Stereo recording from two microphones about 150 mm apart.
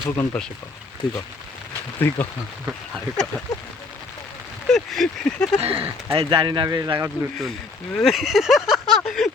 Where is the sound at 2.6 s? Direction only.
Centre (ahead or behind).